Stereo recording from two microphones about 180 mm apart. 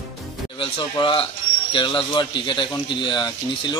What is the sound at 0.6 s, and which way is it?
A man's voice, 30° left (ahead or behind).